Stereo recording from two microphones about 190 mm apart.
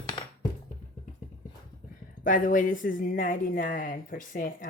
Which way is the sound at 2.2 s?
45° left (ahead or behind).